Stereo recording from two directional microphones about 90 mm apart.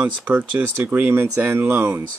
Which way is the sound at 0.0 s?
20° right (ahead or behind).